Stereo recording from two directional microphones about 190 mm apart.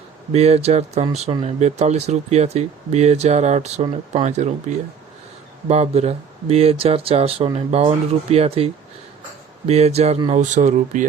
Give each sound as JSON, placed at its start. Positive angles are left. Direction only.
{"t": 0.3, "sound": "speech", "side_deg": -35}
{"t": 5.6, "sound": "speech", "side_deg": -35}